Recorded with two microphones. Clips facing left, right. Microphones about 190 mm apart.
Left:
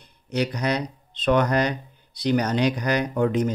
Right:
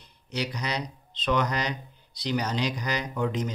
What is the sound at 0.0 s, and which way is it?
Speech, 55° left (ahead or behind).